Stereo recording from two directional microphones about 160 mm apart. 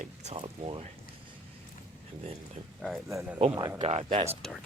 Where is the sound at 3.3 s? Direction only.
30° right (ahead or behind).